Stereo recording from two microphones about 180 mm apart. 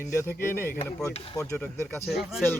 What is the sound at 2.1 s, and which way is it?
Speech, centre (ahead or behind).